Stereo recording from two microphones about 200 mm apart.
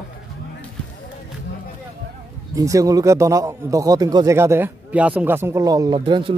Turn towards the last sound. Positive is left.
turn(degrees=-25)  # may be behind; listen again after turning